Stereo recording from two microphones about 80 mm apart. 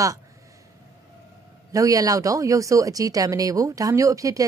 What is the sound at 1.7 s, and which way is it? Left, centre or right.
Speech, right.